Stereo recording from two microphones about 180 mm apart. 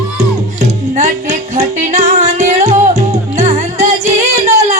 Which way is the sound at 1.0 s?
40° right (ahead or behind).